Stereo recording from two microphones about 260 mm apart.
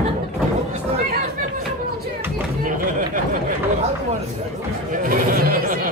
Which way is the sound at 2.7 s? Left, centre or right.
Right.